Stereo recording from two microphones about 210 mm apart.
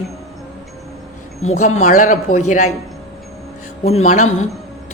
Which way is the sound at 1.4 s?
35° left (ahead or behind).